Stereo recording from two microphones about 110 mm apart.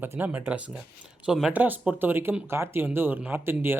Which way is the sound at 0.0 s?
15° right (ahead or behind).